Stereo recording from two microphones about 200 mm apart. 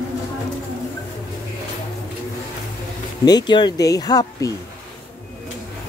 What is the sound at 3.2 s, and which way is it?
Speech, 20° left (ahead or behind).